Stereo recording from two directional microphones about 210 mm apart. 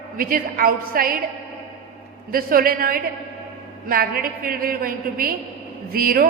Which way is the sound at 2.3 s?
45° right (ahead or behind).